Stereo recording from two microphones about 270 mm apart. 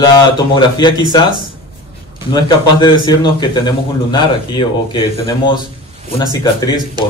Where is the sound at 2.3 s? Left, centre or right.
Centre.